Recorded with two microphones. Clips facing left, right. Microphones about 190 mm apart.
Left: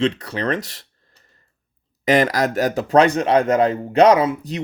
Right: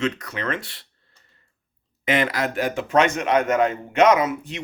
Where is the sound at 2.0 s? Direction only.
40° left (ahead or behind).